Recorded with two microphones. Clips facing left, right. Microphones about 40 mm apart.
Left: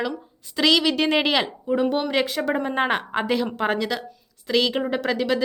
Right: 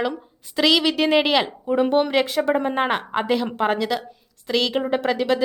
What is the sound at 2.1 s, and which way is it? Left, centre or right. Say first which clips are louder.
A woman's voice: right 3 dB; centre.